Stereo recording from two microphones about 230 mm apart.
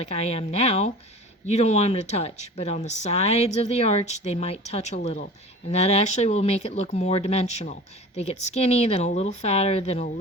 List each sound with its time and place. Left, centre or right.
0.0 s speech: left